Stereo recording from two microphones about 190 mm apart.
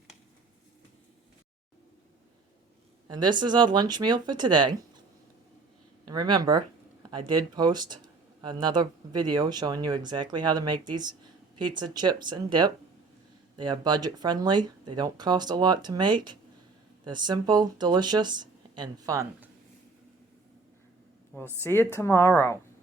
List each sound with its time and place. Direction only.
3.1 s speech: 25° right (ahead or behind)
6.1 s speech: 20° right (ahead or behind)
21.6 s speech: 10° left (ahead or behind)